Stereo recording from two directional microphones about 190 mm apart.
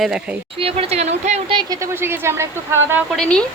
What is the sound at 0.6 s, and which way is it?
Speech, 30° right (ahead or behind).